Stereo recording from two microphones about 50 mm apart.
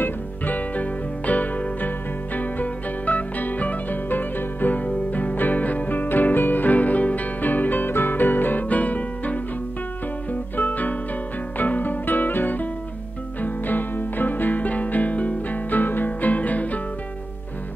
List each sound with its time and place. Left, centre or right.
0.0 s music: left